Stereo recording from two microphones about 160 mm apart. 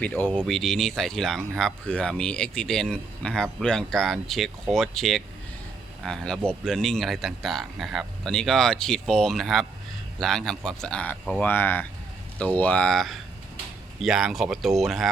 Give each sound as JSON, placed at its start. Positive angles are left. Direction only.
{"t": 0.0, "sound": "speech", "side_deg": 10}